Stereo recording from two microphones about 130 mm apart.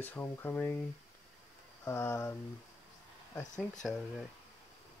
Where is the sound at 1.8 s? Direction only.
20° left (ahead or behind).